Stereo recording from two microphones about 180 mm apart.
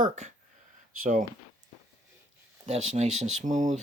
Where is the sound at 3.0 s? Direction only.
40° right (ahead or behind).